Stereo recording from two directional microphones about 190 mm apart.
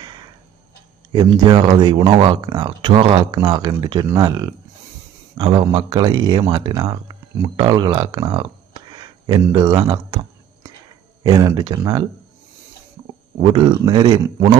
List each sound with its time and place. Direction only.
0.0 s a sound: 20° right (ahead or behind)
1.1 s speech: 20° right (ahead or behind)
13.4 s speech: 25° right (ahead or behind)